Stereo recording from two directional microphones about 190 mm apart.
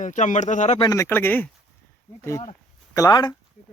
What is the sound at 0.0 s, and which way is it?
Speech, 40° left (ahead or behind).